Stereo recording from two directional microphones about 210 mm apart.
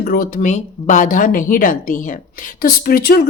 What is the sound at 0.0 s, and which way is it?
A woman's voice, 45° left (ahead or behind).